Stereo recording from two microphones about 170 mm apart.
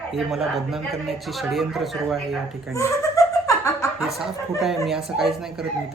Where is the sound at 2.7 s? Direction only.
20° left (ahead or behind).